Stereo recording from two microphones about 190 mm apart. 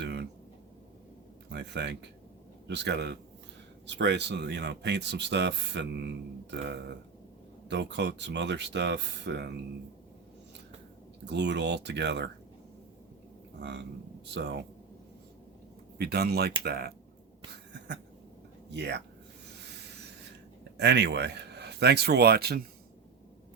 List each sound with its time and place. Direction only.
0.0 s a sound: 60° right (ahead or behind)
1.5 s speech: 65° right (ahead or behind)
11.3 s speech: 65° right (ahead or behind)
13.6 s speech: 65° right (ahead or behind)
16.0 s speech: 55° right (ahead or behind)
18.7 s speech: 65° right (ahead or behind)
20.7 s speech: 60° right (ahead or behind)